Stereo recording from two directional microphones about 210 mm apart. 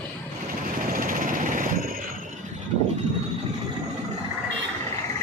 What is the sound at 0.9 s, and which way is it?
Vehicle, 40° right (ahead or behind).